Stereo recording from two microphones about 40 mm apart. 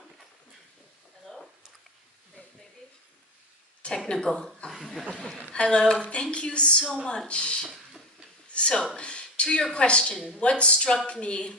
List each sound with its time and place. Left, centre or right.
1.2 s a sound: centre
4.1 s a woman's voice: centre
4.6 s chuckle: centre
5.5 s a woman's voice: left